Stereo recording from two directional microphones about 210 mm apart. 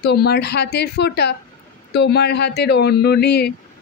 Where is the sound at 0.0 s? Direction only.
50° left (ahead or behind).